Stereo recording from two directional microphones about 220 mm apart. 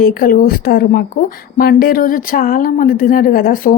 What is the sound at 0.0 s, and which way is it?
A woman's voice, 40° left (ahead or behind).